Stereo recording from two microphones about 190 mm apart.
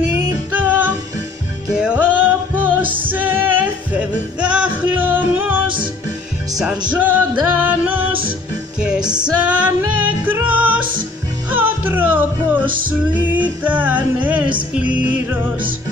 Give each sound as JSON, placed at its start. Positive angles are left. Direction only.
{"t": 0.5, "sound": "music", "side_deg": -10}
{"t": 6.9, "sound": "music", "side_deg": -10}
{"t": 9.0, "sound": "music", "side_deg": -20}
{"t": 9.4, "sound": "music", "side_deg": -10}
{"t": 12.6, "sound": "music", "side_deg": -45}
{"t": 13.3, "sound": "music", "side_deg": -10}